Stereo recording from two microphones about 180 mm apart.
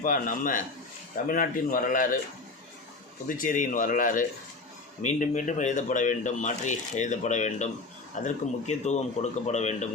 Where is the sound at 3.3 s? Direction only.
45° left (ahead or behind).